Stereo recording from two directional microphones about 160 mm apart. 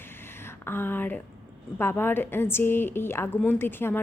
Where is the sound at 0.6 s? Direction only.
15° left (ahead or behind).